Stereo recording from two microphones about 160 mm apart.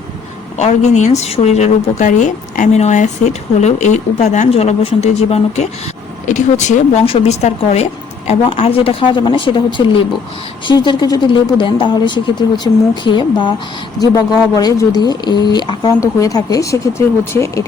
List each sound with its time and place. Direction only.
0.5 s a woman's voice: 45° left (ahead or behind)
7.0 s speech: 35° left (ahead or behind)
14.5 s speech: 20° left (ahead or behind)